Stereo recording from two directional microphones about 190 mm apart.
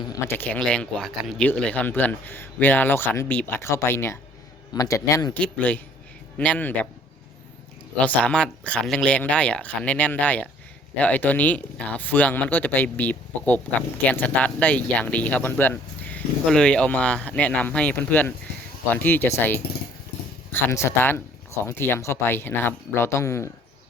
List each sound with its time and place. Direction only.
0.0 s speech: 15° left (ahead or behind)
8.0 s speech: 5° left (ahead or behind)